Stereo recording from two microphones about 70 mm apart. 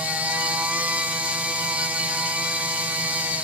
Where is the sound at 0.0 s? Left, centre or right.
Centre.